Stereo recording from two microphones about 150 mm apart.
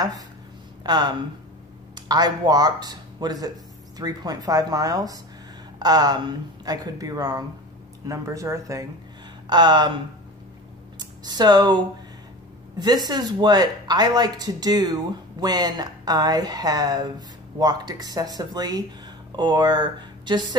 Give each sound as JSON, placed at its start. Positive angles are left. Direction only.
{"t": 0.8, "sound": "speech", "side_deg": -30}
{"t": 11.0, "sound": "speech", "side_deg": -25}